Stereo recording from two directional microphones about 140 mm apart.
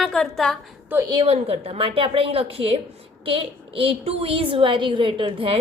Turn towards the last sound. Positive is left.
turn(degrees=-40)  # may be behind; listen again after turning